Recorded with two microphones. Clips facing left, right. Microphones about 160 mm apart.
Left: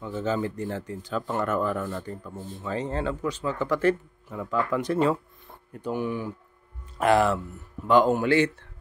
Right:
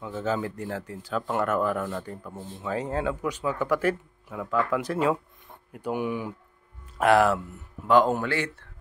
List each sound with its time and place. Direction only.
0.0 s speech: 5° right (ahead or behind)
7.0 s speech: centre (ahead or behind)
8.2 s speech: 20° left (ahead or behind)